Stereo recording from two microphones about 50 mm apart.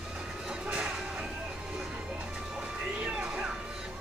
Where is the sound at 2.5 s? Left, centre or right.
Centre.